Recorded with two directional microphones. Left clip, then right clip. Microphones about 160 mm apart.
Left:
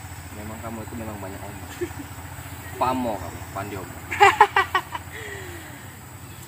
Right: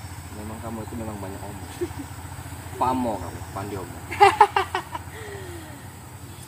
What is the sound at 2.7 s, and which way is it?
Speech, 10° left (ahead or behind).